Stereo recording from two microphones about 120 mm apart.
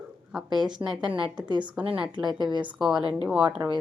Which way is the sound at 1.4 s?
40° right (ahead or behind).